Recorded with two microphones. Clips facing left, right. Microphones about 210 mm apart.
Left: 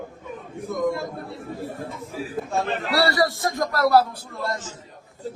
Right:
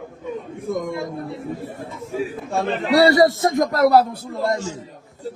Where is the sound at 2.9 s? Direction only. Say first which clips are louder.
Right 8 dB; 20° right (ahead or behind).